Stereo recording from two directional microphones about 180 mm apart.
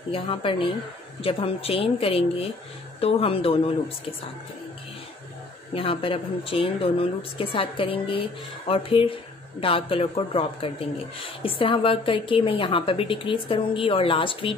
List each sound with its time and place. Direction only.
0.1 s a woman's voice: 30° left (ahead or behind)
5.8 s a woman's voice: 30° left (ahead or behind)